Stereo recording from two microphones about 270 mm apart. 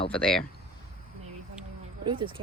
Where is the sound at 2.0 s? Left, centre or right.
Centre.